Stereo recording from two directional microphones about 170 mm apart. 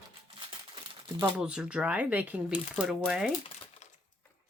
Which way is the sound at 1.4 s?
5° right (ahead or behind).